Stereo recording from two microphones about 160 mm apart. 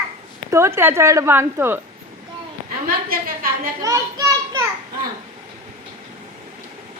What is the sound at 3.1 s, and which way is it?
Speech, 65° right (ahead or behind).